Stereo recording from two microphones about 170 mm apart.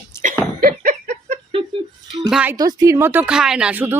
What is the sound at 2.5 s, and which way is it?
A woman's voice, 20° right (ahead or behind).